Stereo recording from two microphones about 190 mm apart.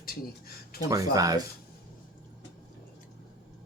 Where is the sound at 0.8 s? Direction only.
20° right (ahead or behind).